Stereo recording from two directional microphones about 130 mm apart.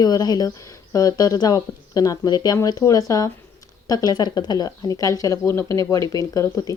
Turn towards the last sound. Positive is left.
turn(degrees=25)  # may be behind; listen again after turning